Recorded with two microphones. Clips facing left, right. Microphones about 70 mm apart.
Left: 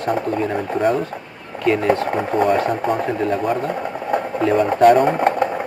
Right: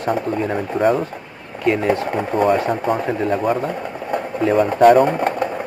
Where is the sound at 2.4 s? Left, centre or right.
Centre.